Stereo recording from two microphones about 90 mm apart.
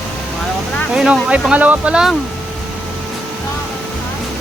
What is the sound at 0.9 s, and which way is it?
Speech, 10° right (ahead or behind).